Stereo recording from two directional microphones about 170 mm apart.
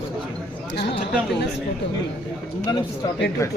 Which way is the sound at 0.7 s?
90° left.